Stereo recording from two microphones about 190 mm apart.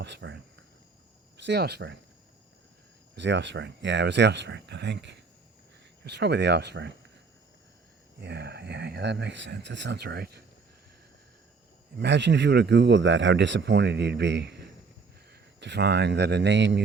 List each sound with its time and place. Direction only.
0.0 s speech: 70° right (ahead or behind)
3.2 s speech: 70° right (ahead or behind)
8.2 s speech: 60° right (ahead or behind)
11.9 s speech: 70° right (ahead or behind)